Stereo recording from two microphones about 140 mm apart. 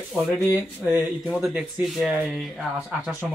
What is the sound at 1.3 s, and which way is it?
Speech, 5° right (ahead or behind).